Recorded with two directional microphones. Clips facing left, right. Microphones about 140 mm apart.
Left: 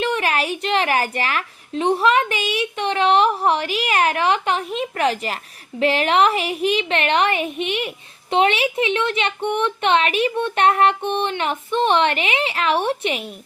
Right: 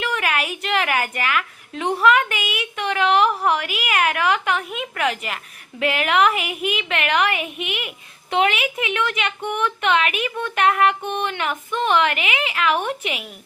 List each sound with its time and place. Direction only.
0.0 s speech: 30° left (ahead or behind)